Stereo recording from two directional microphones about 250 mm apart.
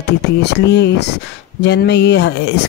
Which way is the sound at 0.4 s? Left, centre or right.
Left.